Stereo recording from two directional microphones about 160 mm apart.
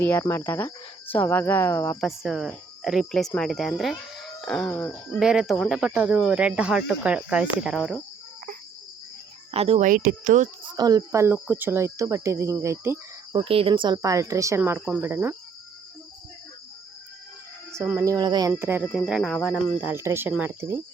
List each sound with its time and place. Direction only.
0.0 s speech: 15° left (ahead or behind)
2.0 s speech: centre (ahead or behind)
9.5 s speech: 40° right (ahead or behind)
9.8 s speech: 60° right (ahead or behind)
10.6 s speech: 25° right (ahead or behind)
13.3 s speech: 35° right (ahead or behind)
14.8 s speech: centre (ahead or behind)
15.0 s speech: 15° right (ahead or behind)
17.7 s speech: 15° right (ahead or behind)
18.6 s speech: 15° right (ahead or behind)
18.9 s speech: centre (ahead or behind)